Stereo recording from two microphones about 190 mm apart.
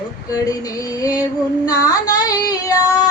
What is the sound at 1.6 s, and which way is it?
Female singing, 20° left (ahead or behind).